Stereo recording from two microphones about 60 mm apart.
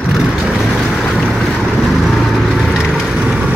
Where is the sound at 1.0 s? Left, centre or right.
Centre.